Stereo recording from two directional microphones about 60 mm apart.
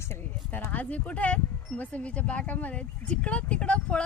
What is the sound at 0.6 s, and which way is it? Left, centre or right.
Speech, left.